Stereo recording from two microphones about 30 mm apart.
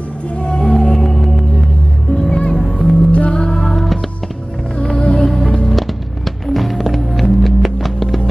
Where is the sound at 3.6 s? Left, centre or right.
Centre.